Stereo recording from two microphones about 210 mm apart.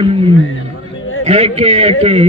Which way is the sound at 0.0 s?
25° right (ahead or behind).